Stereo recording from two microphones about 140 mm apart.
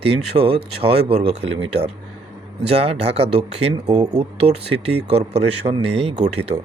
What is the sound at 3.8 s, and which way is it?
Speech, 30° right (ahead or behind).